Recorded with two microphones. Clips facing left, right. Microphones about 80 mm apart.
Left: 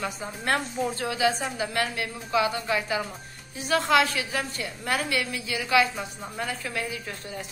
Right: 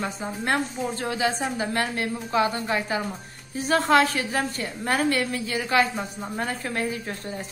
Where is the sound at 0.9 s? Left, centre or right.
Right.